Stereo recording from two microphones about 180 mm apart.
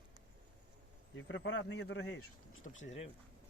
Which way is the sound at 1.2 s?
90° left.